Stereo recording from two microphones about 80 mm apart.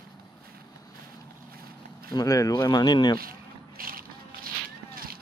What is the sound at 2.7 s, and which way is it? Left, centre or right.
Speech, left.